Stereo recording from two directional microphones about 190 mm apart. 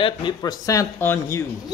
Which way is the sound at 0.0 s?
25° left (ahead or behind).